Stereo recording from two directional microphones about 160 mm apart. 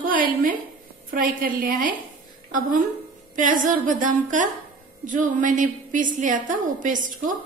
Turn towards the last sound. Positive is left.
turn(degrees=-55)  # may be behind; listen again after turning